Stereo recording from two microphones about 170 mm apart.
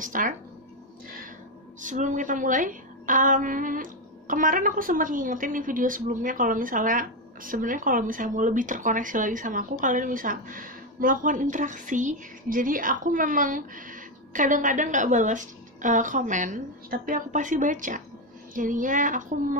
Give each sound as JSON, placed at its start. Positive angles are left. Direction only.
{"t": 0.0, "sound": "a woman's voice", "side_deg": -50}
{"t": 1.8, "sound": "a woman's voice", "side_deg": -50}